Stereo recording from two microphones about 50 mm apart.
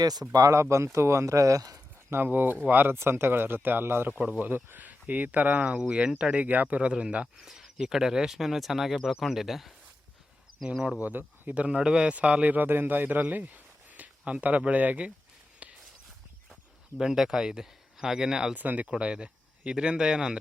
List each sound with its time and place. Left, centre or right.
0.5 s speech: right
2.0 s speech: right
4.1 s speech: centre
4.4 s speech: right
7.3 s speech: centre
11.0 s speech: right
11.5 s speech: right
15.6 s a sound: right
17.0 s speech: centre
18.5 s speech: right
18.9 s speech: centre